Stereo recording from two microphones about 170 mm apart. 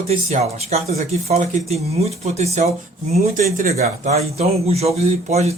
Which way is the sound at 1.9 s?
40° right (ahead or behind).